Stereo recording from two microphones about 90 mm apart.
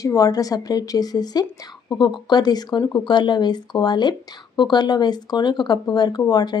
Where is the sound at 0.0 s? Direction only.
40° left (ahead or behind).